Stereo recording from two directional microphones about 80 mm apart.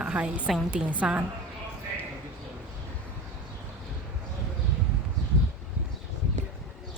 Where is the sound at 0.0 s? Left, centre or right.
Centre.